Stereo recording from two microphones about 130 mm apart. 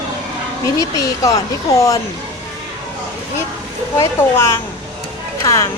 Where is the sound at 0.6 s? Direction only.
25° left (ahead or behind).